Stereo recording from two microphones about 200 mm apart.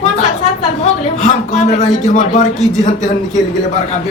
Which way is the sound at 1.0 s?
35° left (ahead or behind).